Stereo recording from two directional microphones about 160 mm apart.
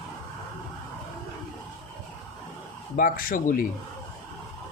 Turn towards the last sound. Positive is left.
turn(degrees=60)  # may be behind; listen again after turning